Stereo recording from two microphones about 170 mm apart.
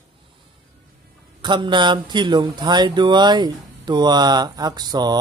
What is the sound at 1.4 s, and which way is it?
Speech, 25° right (ahead or behind).